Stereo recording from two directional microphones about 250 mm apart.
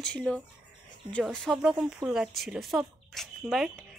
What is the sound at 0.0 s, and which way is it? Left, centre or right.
A woman's voice, centre.